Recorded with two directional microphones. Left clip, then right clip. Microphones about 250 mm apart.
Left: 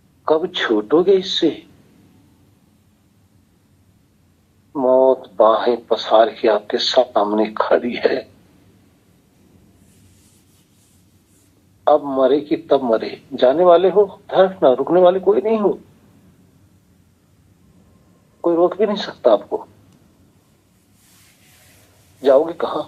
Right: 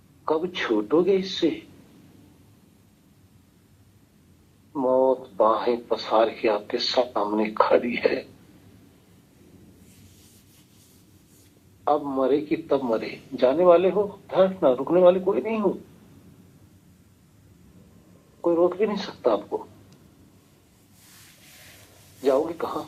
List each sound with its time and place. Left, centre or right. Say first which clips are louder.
0.3 s a man's voice: left 7 dB; left
4.7 s speech: left 7 dB; left
11.9 s a man's voice: left 8 dB; left
18.4 s a man's voice: left 6 dB; left
22.2 s a man's voice: left 9 dB; left